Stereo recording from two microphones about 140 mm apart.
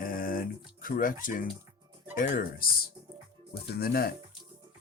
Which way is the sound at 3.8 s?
90° left.